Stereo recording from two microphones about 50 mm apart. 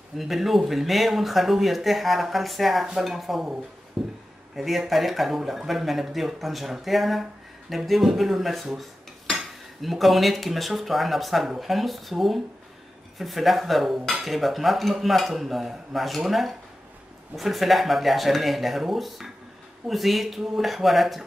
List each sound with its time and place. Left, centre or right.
0.2 s speech: centre
4.0 s a sound: centre
4.6 s speech: centre